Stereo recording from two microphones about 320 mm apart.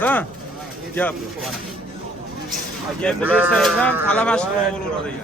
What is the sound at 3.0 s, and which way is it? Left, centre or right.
Speech, centre.